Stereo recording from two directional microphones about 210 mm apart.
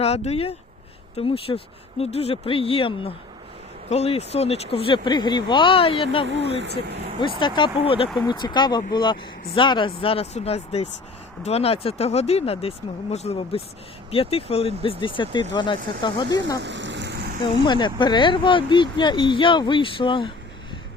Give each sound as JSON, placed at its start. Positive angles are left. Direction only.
{"t": 0.0, "sound": "speech", "side_deg": 30}
{"t": 6.6, "sound": "speech", "side_deg": -55}
{"t": 7.2, "sound": "speech", "side_deg": 20}
{"t": 16.6, "sound": "a sound", "side_deg": -60}
{"t": 17.5, "sound": "speech", "side_deg": 20}